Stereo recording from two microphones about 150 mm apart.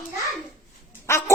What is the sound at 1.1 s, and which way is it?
Quack, 15° left (ahead or behind).